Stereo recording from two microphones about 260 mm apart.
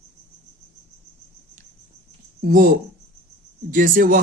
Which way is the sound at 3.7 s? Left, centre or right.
Right.